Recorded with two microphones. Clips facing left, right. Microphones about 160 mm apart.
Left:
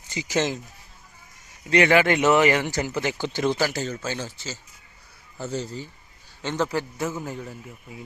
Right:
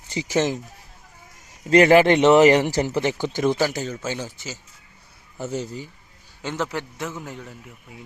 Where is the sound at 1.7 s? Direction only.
40° right (ahead or behind); by 5.9 s 15° right (ahead or behind).